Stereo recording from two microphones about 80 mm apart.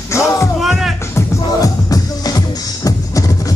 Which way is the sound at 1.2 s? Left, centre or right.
Left.